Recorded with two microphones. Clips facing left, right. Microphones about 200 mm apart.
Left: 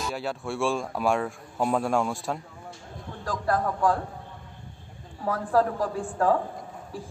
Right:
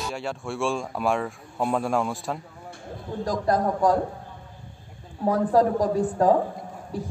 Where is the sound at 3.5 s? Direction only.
40° right (ahead or behind).